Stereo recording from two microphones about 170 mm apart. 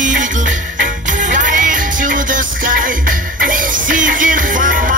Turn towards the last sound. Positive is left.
turn(degrees=-50)  # may be behind; listen again after turning